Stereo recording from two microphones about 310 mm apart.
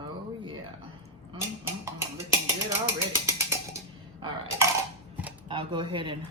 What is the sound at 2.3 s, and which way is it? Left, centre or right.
Music, centre.